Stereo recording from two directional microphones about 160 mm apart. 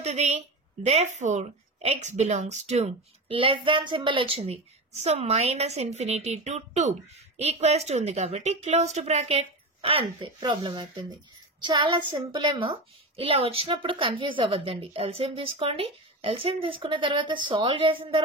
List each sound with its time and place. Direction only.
0.0 s a woman's voice: 45° right (ahead or behind)